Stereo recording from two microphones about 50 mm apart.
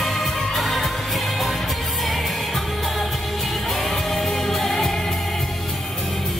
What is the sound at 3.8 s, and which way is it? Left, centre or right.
Music, centre.